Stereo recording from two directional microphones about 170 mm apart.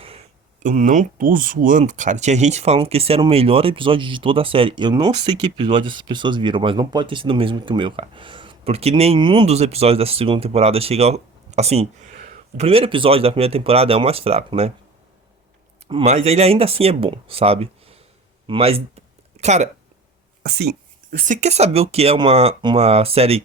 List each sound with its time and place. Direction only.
0.0 s a sound: 35° right (ahead or behind)
0.6 s speech: 45° right (ahead or behind)
15.9 s speech: 35° right (ahead or behind)
19.4 s speech: 40° right (ahead or behind)
20.4 s speech: 70° right (ahead or behind); by 23.4 s 35° right (ahead or behind)